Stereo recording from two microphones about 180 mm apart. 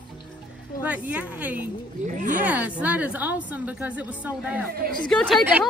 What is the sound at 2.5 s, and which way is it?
A woman's voice, 10° right (ahead or behind).